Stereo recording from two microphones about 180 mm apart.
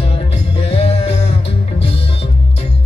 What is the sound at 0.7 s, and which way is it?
Music, 35° left (ahead or behind).